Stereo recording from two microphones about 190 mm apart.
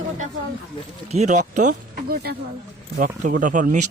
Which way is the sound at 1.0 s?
35° right (ahead or behind).